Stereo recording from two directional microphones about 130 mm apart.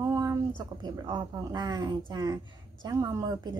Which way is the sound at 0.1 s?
25° right (ahead or behind).